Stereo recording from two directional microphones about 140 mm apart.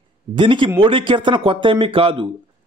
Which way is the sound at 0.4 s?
35° right (ahead or behind).